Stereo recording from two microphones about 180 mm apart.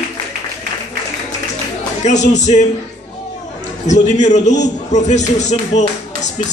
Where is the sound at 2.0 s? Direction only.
40° left (ahead or behind).